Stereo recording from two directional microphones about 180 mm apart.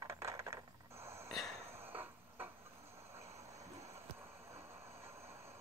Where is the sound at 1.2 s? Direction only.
Centre (ahead or behind).